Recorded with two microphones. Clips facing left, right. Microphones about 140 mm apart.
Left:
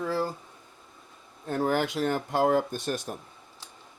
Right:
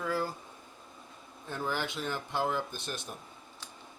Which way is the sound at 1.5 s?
45° left (ahead or behind).